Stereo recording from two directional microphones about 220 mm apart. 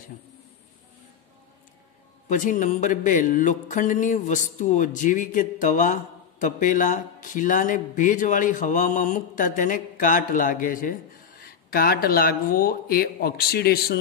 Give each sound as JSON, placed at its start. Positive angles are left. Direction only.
{"t": 2.2, "sound": "speech", "side_deg": 35}